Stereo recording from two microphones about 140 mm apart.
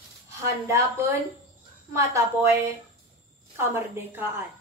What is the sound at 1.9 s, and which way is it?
Speech, 20° right (ahead or behind).